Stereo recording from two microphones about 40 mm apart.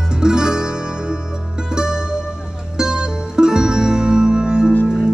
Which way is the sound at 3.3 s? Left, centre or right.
Centre.